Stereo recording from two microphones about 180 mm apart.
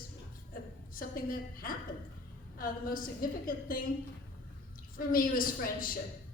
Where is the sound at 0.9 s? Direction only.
50° left (ahead or behind).